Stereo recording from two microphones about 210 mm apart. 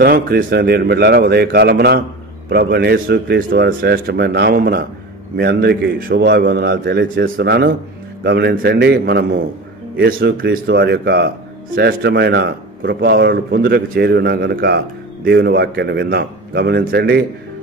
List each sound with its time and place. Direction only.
0.0 s speech: 45° right (ahead or behind)